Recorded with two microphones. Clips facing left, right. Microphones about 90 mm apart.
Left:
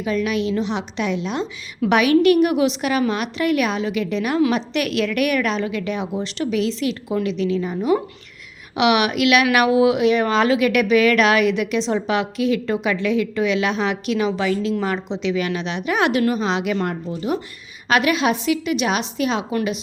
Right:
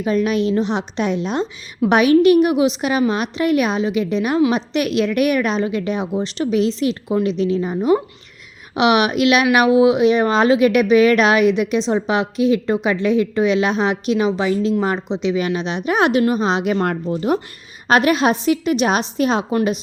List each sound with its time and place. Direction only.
0.0 s a woman's voice: 35° right (ahead or behind)
16.8 s speech: 55° right (ahead or behind)
17.8 s a woman's voice: 40° right (ahead or behind)